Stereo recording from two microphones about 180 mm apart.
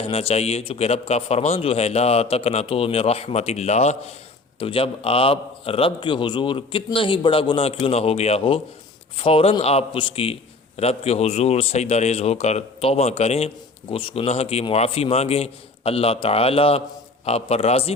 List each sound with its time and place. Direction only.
0.0 s a man's voice: 30° left (ahead or behind)